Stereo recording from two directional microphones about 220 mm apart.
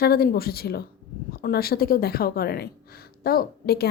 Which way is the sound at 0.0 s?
45° left (ahead or behind).